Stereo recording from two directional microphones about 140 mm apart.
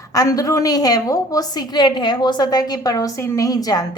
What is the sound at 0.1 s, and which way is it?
A woman's voice, 25° left (ahead or behind).